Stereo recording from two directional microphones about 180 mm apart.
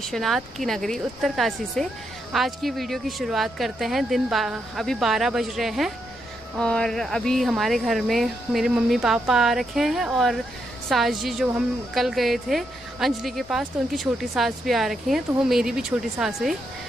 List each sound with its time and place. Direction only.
0.0 s speech: centre (ahead or behind)